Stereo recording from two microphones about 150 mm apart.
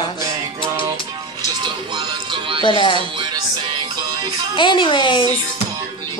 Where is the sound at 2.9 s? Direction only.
35° right (ahead or behind).